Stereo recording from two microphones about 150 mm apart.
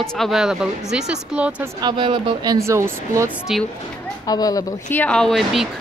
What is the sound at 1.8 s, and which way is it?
A woman's voice, 35° right (ahead or behind).